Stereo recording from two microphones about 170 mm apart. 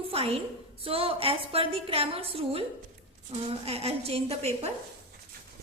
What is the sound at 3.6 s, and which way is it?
A woman's voice, 35° right (ahead or behind).